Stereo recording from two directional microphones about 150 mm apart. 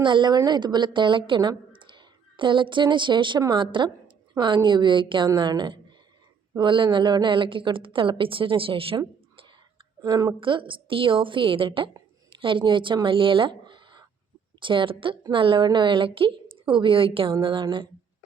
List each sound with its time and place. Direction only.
0.0 s a woman's voice: 30° right (ahead or behind)
10.0 s a woman's voice: 25° right (ahead or behind)